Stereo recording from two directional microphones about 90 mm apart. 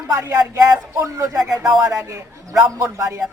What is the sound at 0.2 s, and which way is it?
Speech, 40° right (ahead or behind).